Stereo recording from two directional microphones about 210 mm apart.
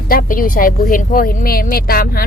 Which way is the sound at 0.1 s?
40° left (ahead or behind).